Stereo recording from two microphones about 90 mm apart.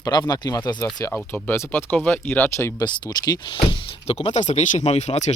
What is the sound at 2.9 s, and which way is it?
Speech, 50° left (ahead or behind).